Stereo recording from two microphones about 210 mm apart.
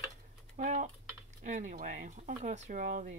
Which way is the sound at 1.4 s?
40° right (ahead or behind).